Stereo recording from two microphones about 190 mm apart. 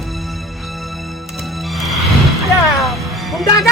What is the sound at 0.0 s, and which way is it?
Music, centre (ahead or behind).